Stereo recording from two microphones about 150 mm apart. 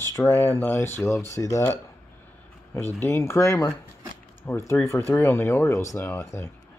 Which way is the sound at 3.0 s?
15° left (ahead or behind).